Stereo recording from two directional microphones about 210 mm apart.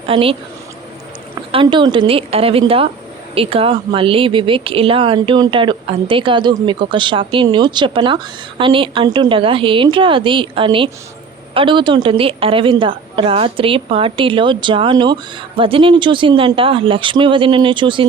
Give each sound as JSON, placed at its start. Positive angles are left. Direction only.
{"t": 0.1, "sound": "speech", "side_deg": -25}
{"t": 1.4, "sound": "speech", "side_deg": -20}